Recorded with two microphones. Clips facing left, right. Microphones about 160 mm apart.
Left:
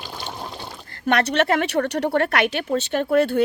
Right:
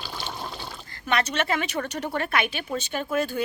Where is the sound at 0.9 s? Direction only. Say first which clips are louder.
Left 6 dB; 65° left (ahead or behind).